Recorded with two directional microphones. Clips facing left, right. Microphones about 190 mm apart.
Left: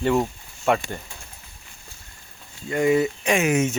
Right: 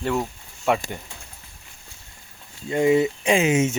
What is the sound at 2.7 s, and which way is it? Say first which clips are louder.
Speech: right 1 dB; 20° right (ahead or behind).